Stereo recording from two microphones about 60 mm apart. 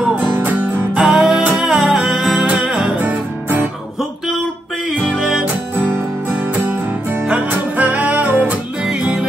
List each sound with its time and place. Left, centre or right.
0.4 s music: right
1.0 s music: centre
3.0 s music: right
5.0 s music: centre
6.7 s music: right